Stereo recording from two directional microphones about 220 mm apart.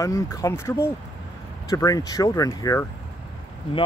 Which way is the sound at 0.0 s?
15° left (ahead or behind).